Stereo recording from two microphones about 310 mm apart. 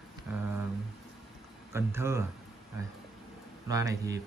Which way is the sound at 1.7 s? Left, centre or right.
Centre.